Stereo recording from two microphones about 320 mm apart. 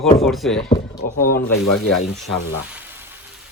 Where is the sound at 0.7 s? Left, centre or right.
Centre.